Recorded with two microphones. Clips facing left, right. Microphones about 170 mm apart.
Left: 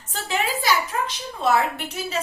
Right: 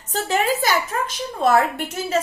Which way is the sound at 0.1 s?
40° right (ahead or behind).